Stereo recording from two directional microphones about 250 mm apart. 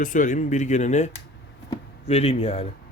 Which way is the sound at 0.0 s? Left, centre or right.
Left.